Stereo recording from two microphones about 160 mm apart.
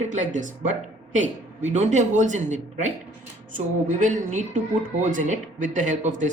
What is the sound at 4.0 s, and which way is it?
Speech, 55° right (ahead or behind).